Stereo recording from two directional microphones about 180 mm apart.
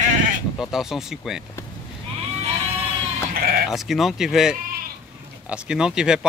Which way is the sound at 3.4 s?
55° right (ahead or behind).